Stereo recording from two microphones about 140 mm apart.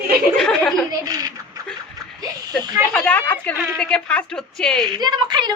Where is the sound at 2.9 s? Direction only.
5° left (ahead or behind).